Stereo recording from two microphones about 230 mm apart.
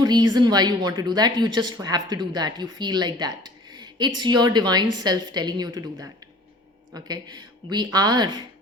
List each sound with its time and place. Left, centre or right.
0.0 s speech: centre